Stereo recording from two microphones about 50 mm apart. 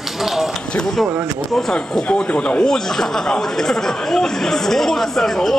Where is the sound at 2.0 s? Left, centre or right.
Left.